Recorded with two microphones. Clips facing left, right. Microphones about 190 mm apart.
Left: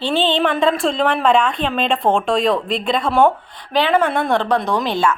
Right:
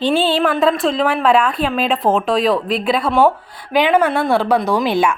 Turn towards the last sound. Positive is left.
turn(degrees=-10)  # may be behind; listen again after turning